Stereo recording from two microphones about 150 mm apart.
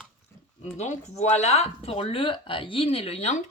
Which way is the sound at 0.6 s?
50° left (ahead or behind).